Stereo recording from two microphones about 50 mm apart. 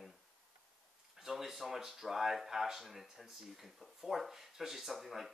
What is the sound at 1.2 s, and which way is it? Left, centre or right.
Speech, centre.